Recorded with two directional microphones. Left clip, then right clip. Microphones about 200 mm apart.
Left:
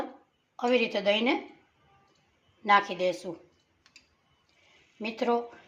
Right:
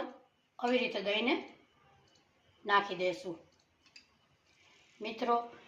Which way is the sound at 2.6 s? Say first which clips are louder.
Left 7 dB; 50° left (ahead or behind).